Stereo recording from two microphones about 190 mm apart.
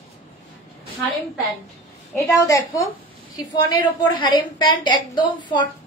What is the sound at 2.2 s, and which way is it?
A woman's voice, 15° left (ahead or behind).